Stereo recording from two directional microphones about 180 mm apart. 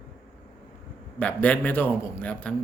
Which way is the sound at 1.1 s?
10° left (ahead or behind).